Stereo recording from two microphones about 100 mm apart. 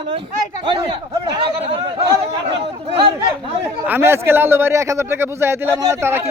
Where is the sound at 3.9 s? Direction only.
25° right (ahead or behind).